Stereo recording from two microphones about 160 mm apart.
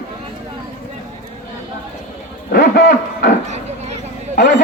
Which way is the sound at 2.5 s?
70° left (ahead or behind).